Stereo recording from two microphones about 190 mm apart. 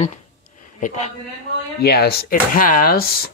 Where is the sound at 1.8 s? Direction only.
55° left (ahead or behind).